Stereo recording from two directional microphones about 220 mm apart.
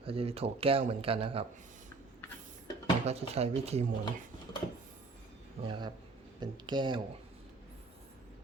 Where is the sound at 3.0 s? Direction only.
30° right (ahead or behind).